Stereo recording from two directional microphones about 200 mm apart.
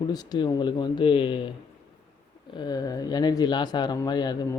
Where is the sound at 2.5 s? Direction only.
20° left (ahead or behind).